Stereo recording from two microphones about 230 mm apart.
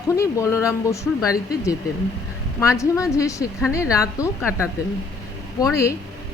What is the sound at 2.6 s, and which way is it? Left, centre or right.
Speech, centre.